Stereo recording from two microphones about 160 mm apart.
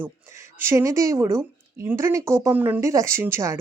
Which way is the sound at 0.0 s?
15° right (ahead or behind).